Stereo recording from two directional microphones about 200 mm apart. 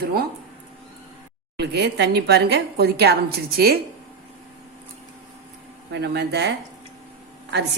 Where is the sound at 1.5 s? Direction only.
55° right (ahead or behind).